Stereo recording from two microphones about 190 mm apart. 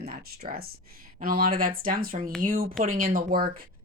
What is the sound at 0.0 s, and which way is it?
Speech, 55° right (ahead or behind).